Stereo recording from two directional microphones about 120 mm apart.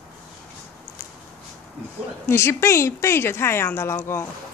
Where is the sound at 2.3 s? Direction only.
20° left (ahead or behind).